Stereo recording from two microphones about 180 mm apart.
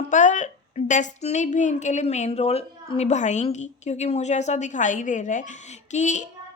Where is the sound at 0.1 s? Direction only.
45° left (ahead or behind).